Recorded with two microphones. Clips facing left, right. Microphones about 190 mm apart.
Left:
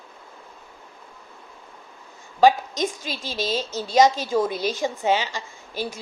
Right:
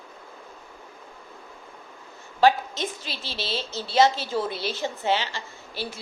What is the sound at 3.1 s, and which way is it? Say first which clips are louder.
Speech: left 5 dB; 45° left (ahead or behind).